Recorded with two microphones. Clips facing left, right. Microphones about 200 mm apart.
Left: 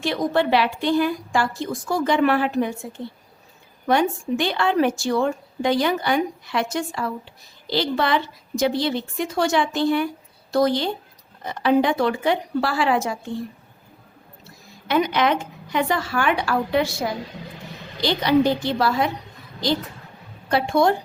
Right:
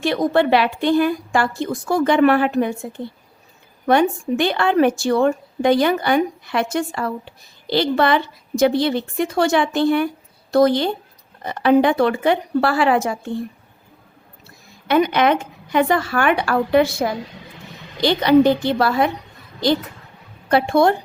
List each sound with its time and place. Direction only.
0.0 s a woman's voice: 60° right (ahead or behind)
3.8 s a woman's voice: 55° right (ahead or behind)
14.8 s a woman's voice: 55° right (ahead or behind)
18.0 s a woman's voice: 55° right (ahead or behind)
20.5 s a woman's voice: 60° right (ahead or behind)